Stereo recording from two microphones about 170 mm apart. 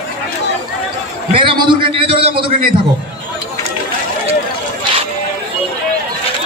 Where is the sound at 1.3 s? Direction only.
30° right (ahead or behind).